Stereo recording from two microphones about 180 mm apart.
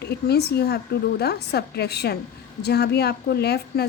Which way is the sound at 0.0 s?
65° left (ahead or behind).